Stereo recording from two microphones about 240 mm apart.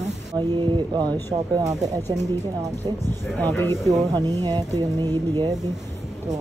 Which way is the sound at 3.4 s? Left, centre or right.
Centre.